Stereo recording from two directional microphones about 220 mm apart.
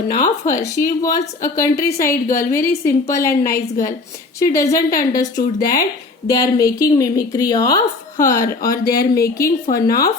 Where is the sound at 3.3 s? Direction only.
40° left (ahead or behind).